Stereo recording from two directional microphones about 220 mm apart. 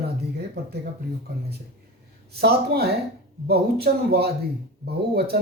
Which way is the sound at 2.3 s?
45° right (ahead or behind).